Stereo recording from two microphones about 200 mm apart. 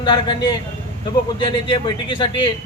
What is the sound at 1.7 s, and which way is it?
Speech, 25° left (ahead or behind).